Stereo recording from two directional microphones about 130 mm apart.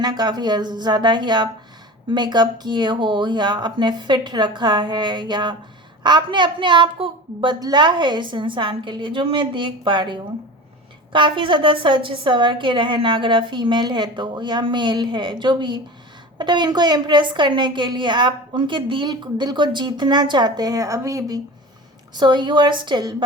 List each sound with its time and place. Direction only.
0.0 s a woman's voice: 30° right (ahead or behind)